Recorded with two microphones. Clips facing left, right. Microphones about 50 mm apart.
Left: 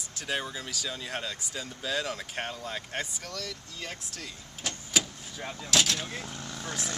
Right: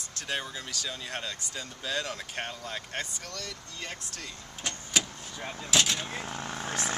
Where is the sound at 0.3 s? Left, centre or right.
Centre.